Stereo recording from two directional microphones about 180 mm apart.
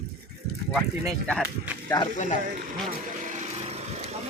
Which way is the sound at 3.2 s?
40° right (ahead or behind).